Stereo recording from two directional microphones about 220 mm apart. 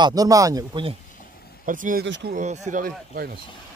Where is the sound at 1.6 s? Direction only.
35° right (ahead or behind).